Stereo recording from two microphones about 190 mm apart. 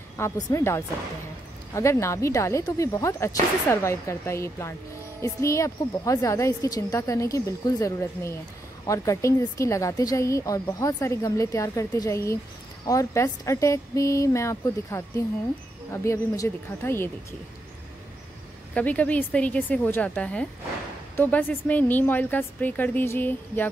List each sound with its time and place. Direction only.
0.2 s speech: 15° left (ahead or behind)
18.8 s speech: 5° left (ahead or behind)